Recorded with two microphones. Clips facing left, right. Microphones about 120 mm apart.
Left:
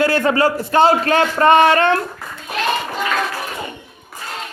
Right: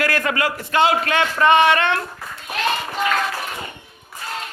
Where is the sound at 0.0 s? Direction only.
30° left (ahead or behind).